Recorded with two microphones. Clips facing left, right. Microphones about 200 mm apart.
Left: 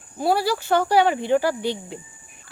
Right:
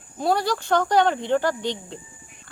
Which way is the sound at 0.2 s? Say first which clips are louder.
Left 1 dB; 5° left (ahead or behind).